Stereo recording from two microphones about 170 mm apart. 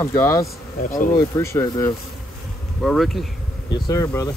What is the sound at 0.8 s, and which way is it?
Speech, 60° left (ahead or behind).